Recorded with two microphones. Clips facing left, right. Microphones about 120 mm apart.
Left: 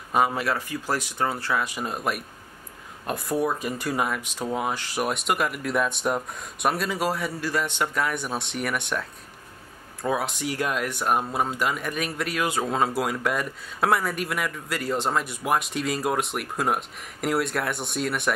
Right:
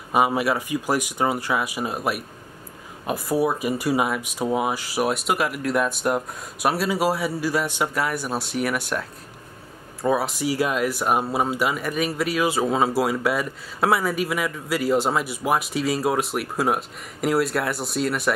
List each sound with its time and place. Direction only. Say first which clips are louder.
0.1 s speech: right 3 dB; 10° right (ahead or behind)
10.0 s speech: right 4 dB; 5° right (ahead or behind)